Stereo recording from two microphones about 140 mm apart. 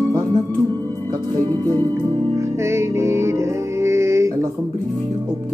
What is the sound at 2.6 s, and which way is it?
Music, 20° right (ahead or behind).